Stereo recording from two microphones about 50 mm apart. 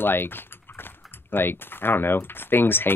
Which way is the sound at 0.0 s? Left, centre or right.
Left.